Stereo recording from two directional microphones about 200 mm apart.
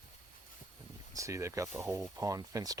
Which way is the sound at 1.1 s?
15° right (ahead or behind).